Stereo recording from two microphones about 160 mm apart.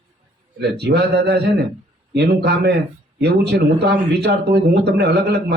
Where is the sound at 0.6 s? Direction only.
90° right.